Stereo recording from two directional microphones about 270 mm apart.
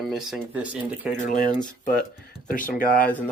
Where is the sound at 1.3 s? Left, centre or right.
Left.